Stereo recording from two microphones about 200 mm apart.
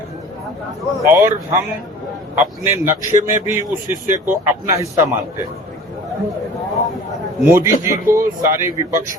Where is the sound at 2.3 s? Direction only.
10° right (ahead or behind).